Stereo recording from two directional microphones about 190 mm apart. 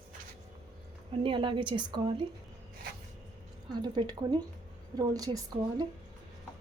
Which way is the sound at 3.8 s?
25° right (ahead or behind).